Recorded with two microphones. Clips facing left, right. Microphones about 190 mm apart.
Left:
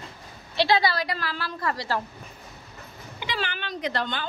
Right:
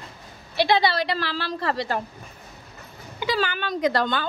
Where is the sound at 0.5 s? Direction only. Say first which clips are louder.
Right 2 dB; 20° right (ahead or behind).